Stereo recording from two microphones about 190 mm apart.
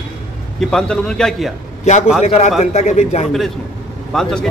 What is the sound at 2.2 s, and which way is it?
A man's voice, 35° left (ahead or behind).